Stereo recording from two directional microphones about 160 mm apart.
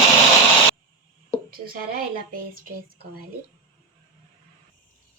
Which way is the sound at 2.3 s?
60° right (ahead or behind).